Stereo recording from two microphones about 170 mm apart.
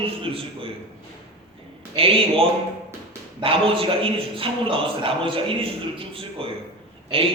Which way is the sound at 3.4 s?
30° right (ahead or behind).